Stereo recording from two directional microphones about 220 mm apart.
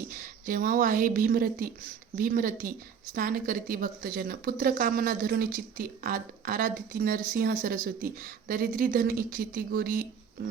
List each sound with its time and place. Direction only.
0.1 s a woman's voice: 40° right (ahead or behind)